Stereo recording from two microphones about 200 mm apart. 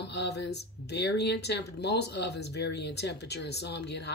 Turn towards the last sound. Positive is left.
turn(degrees=55)  # may be behind; listen again after turning